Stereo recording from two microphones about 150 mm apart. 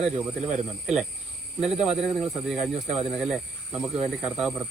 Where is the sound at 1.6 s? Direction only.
45° right (ahead or behind).